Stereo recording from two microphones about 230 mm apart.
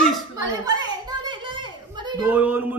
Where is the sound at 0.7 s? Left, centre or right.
Centre.